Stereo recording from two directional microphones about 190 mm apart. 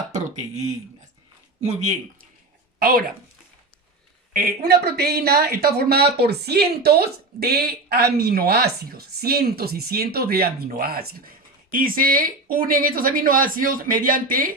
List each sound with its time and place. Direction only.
1.6 s speech: 35° right (ahead or behind)
2.7 s speech: 50° right (ahead or behind)
4.4 s speech: 55° right (ahead or behind)